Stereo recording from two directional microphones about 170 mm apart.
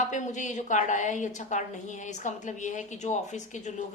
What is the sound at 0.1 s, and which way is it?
A woman's voice, 45° left (ahead or behind).